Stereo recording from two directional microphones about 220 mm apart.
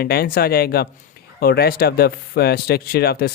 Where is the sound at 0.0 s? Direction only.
45° left (ahead or behind).